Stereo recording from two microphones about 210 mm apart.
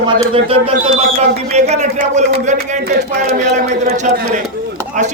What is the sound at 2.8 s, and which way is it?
Speech, 50° right (ahead or behind).